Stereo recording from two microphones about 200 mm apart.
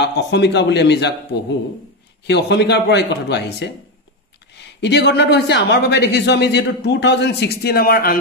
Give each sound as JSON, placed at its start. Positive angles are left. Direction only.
{"t": 0.0, "sound": "speech", "side_deg": 60}
{"t": 2.2, "sound": "speech", "side_deg": 60}
{"t": 4.7, "sound": "speech", "side_deg": 60}